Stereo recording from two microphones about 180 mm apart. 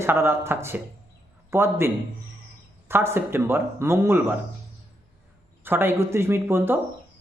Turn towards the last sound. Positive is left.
turn(degrees=-15)  # may be behind; listen again after turning